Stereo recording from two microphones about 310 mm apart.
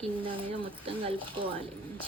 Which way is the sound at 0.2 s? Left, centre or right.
Centre.